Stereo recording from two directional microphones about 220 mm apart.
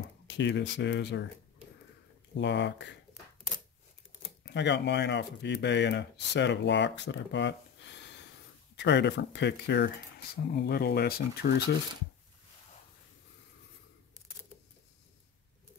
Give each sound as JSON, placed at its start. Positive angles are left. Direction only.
{"t": 0.3, "sound": "speech", "side_deg": 55}
{"t": 2.3, "sound": "speech", "side_deg": 55}
{"t": 4.4, "sound": "speech", "side_deg": 50}